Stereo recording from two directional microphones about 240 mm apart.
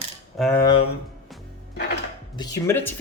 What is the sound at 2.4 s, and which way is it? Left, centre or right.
Speech, centre.